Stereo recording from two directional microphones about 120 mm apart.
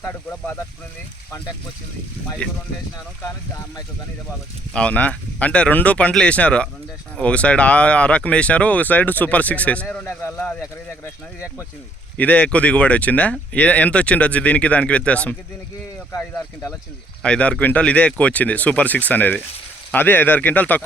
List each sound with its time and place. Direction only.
0.0 s speech: 20° left (ahead or behind)
2.4 s speech: 10° left (ahead or behind)
3.2 s speech: 25° left (ahead or behind)
4.7 s speech: 10° left (ahead or behind)
12.1 s speech: 10° left (ahead or behind)
16.3 s speech: 25° left (ahead or behind)
17.2 s speech: 10° left (ahead or behind)